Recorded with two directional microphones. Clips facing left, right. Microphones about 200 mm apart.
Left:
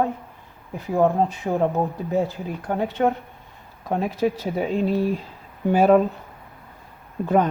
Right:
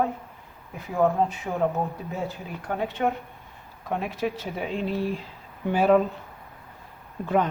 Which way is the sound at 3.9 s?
35° left (ahead or behind).